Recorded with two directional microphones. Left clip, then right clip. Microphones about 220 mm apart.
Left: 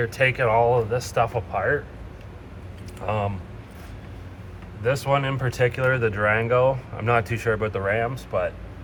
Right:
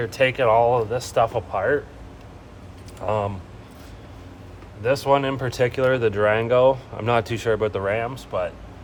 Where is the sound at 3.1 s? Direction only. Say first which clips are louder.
Right 2 dB; 40° right (ahead or behind).